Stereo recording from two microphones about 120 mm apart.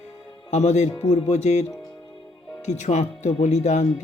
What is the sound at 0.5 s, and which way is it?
Speech, 70° left (ahead or behind).